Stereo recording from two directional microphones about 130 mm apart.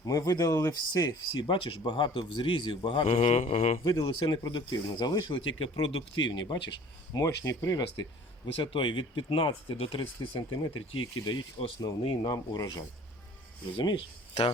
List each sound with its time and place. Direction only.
0.0 s speech: 30° left (ahead or behind); by 3.8 s 50° left (ahead or behind)
3.8 s speech: 35° left (ahead or behind)
7.1 s speech: 25° left (ahead or behind)
8.6 s speech: 40° left (ahead or behind)
13.7 s speech: 40° left (ahead or behind)